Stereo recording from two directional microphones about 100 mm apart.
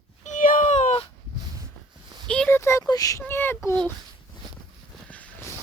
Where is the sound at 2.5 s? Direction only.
25° left (ahead or behind).